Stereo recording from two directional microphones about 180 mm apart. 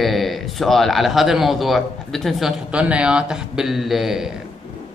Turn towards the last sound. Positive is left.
turn(degrees=0)  # may be behind; listen again after turning